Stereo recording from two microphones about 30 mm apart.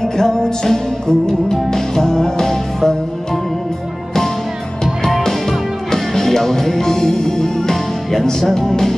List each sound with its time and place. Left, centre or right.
0.0 s music: centre
5.9 s music: centre